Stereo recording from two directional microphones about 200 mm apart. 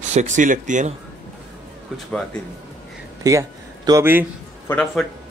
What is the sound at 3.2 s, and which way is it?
Speech, 15° right (ahead or behind).